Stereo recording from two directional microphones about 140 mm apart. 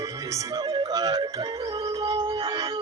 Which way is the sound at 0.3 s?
25° right (ahead or behind).